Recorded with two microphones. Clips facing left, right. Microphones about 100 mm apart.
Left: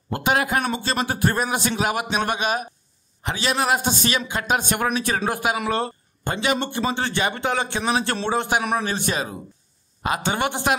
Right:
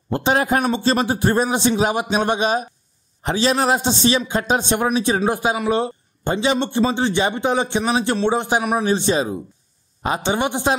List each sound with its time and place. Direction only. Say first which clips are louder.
0.1 s a man's voice: right 3 dB; 30° right (ahead or behind)